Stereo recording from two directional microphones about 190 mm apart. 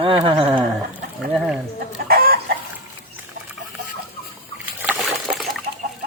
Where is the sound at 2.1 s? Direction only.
50° right (ahead or behind).